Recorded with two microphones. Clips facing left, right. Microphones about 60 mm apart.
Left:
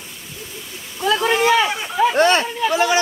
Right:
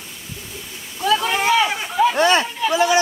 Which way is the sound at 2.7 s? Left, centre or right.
Left.